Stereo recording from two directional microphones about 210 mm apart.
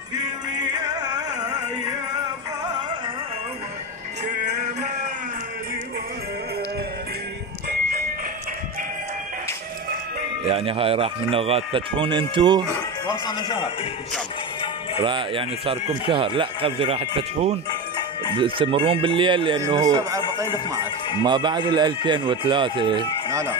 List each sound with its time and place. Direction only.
0.2 s music: 20° right (ahead or behind)
10.4 s speech: 25° right (ahead or behind)
15.0 s speech: 25° right (ahead or behind)
17.6 s music: 20° left (ahead or behind)
18.3 s speech: 25° right (ahead or behind)
21.2 s speech: 20° right (ahead or behind)